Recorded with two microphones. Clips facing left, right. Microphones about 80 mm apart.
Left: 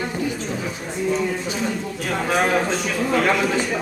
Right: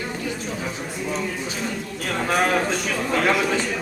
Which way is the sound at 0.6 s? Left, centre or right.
Centre.